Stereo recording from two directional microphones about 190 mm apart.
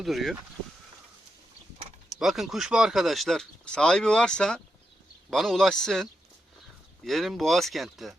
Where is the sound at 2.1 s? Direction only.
Centre (ahead or behind).